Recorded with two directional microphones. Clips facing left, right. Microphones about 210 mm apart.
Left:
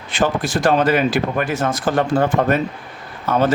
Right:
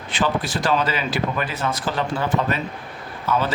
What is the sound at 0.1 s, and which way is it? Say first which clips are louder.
Speech: left 4 dB; 50° left (ahead or behind).